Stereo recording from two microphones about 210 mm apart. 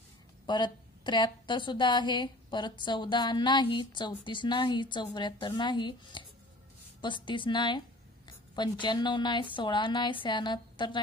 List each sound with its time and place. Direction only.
0.5 s a woman's voice: 20° left (ahead or behind)
8.8 s a woman's voice: 20° left (ahead or behind)